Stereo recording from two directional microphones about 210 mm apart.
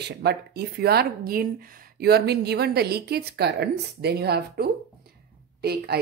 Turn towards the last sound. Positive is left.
turn(degrees=-50)  # may be behind; listen again after turning